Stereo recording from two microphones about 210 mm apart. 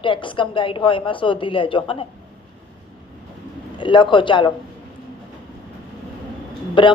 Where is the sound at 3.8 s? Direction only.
20° left (ahead or behind).